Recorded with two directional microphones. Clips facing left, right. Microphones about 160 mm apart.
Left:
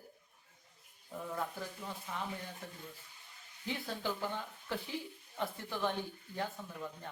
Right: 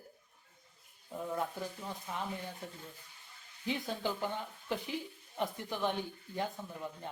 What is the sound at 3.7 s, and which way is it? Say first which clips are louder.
Speech: right 3 dB; 20° right (ahead or behind).